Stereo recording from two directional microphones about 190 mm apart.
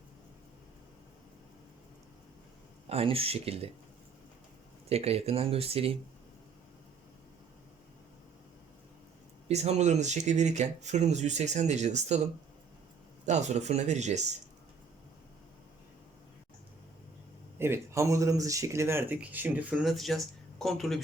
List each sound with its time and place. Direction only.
2.9 s speech: 30° right (ahead or behind)
4.9 s speech: 30° right (ahead or behind)
9.5 s speech: 35° right (ahead or behind)
17.6 s speech: 15° right (ahead or behind); by 21.0 s centre (ahead or behind)